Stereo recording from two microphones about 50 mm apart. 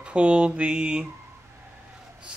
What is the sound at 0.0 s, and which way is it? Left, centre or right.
Speech, right.